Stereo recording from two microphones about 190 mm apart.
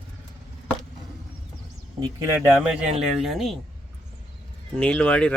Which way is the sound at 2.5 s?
5° right (ahead or behind).